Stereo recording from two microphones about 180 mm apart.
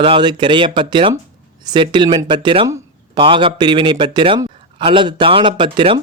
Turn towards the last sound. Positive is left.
turn(degrees=-25)  # may be behind; listen again after turning